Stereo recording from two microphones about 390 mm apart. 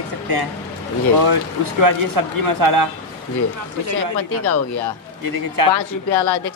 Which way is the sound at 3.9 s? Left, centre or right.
Left.